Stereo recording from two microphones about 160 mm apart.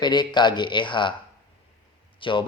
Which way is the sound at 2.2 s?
30° left (ahead or behind).